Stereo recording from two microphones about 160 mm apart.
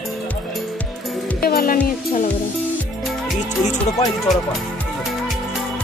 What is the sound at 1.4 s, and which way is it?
Music, 65° left (ahead or behind).